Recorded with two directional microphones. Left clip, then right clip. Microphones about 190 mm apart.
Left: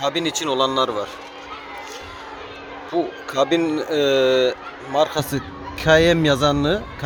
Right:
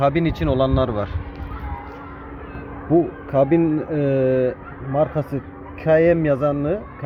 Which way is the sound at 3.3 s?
25° left (ahead or behind).